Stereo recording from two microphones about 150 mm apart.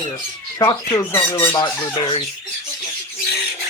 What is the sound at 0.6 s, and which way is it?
Speech, 25° left (ahead or behind).